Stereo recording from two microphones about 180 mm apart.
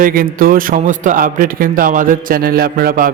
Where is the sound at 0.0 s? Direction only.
50° right (ahead or behind).